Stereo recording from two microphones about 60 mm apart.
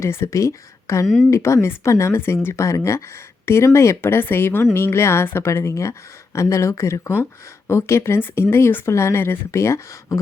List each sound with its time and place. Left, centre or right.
0.0 s a woman's voice: left
1.0 s speech: centre
1.3 s a woman's voice: left
5.5 s a woman's voice: left
8.9 s a woman's voice: left